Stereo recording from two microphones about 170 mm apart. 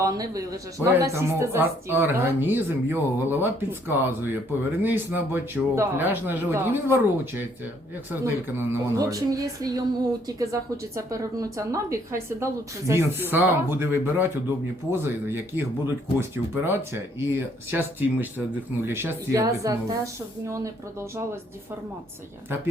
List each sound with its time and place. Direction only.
0.0 s speech: 20° right (ahead or behind)